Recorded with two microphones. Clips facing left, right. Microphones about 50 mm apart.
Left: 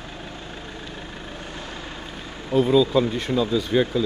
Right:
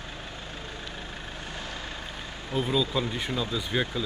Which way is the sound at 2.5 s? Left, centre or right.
Centre.